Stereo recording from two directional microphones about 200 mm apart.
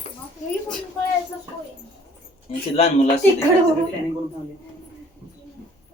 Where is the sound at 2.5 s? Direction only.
30° left (ahead or behind).